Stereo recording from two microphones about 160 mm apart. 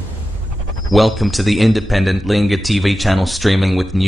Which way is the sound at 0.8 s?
Centre (ahead or behind).